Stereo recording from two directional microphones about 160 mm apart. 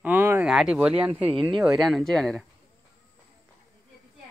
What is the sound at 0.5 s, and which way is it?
Speech, 5° right (ahead or behind).